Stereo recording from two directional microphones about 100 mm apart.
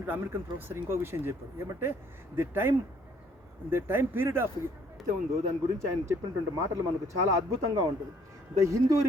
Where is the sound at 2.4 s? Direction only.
20° right (ahead or behind).